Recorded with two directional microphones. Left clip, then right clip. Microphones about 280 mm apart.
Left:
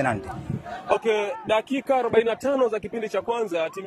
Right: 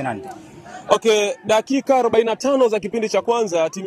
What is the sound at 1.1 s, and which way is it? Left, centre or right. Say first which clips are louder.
Speech: right 6 dB; right.